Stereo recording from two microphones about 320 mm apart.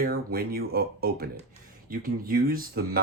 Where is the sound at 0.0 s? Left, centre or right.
Right.